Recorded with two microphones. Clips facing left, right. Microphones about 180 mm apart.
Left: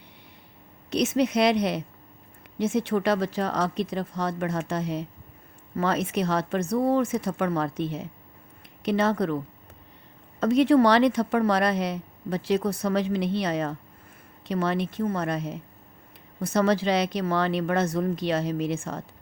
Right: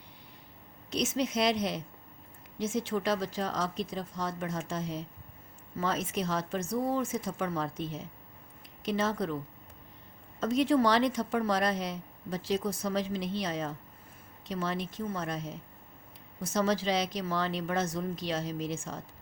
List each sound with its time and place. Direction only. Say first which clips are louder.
0.9 s a woman's voice: left 7 dB; 65° left (ahead or behind)
10.4 s a woman's voice: left 7 dB; 65° left (ahead or behind)